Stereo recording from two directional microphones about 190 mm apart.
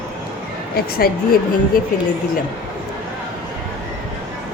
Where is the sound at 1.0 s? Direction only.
50° left (ahead or behind).